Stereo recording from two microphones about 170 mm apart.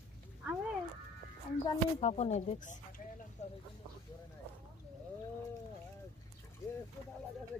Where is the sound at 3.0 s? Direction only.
55° left (ahead or behind).